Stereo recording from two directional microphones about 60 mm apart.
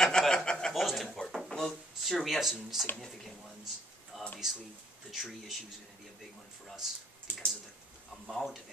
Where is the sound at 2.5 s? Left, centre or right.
Centre.